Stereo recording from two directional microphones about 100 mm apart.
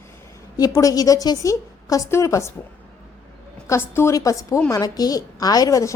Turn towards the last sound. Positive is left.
turn(degrees=35)  # may be behind; listen again after turning